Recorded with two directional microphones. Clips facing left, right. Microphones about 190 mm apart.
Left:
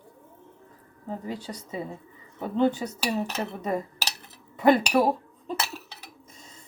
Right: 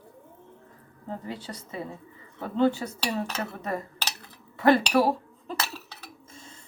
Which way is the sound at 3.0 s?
5° left (ahead or behind).